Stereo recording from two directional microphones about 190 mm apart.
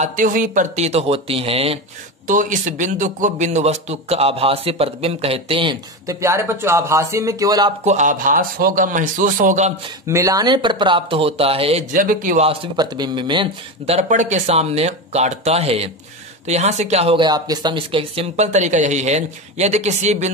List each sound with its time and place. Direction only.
0.0 s speech: 45° right (ahead or behind)
2.2 s speech: 45° right (ahead or behind); by 5.8 s 30° right (ahead or behind)
6.0 s speech: 15° right (ahead or behind)
7.8 s a man's voice: 40° right (ahead or behind)
10.0 s speech: 15° right (ahead or behind)
11.9 s a man's voice: 45° right (ahead or behind)
12.4 s speech: 20° right (ahead or behind)